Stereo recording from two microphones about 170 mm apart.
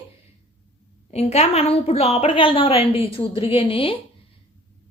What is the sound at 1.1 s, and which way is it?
A woman's voice, 40° left (ahead or behind).